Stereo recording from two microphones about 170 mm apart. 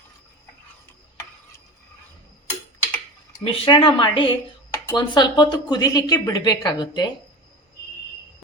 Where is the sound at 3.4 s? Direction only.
30° left (ahead or behind).